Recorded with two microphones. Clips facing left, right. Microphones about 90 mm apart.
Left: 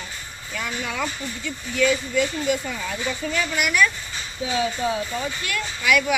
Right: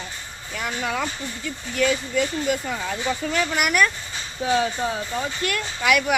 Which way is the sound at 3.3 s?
50° right (ahead or behind).